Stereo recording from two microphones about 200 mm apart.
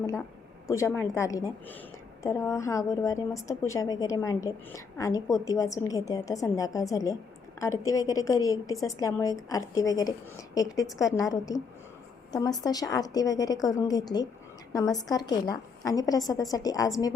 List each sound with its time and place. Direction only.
0.0 s a woman's voice: 15° left (ahead or behind)